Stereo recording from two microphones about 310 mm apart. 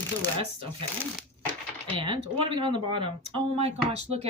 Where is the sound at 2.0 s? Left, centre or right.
Centre.